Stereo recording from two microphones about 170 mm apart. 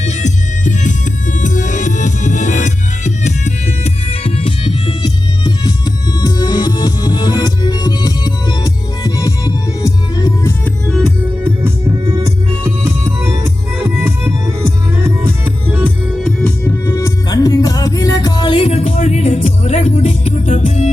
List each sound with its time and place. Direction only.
0.0 s music: 45° left (ahead or behind)
5.4 s music: 25° left (ahead or behind)
11.4 s music: 15° right (ahead or behind)
16.6 s music: 15° left (ahead or behind); by 20.9 s 40° left (ahead or behind)